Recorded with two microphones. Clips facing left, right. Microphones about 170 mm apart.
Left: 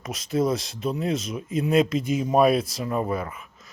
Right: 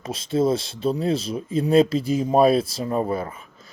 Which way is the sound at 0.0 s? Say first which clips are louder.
Right 3 dB; 30° right (ahead or behind).